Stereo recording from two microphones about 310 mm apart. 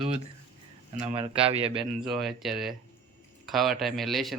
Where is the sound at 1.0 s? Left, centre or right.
Centre.